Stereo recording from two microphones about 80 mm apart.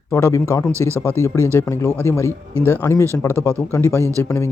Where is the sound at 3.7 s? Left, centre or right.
Left.